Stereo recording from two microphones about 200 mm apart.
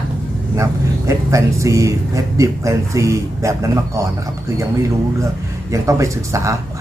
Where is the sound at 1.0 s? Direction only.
15° right (ahead or behind).